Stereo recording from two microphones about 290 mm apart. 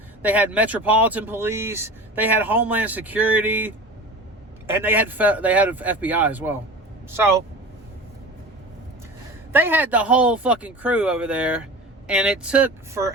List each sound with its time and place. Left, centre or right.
0.2 s speech: centre
9.5 s speech: centre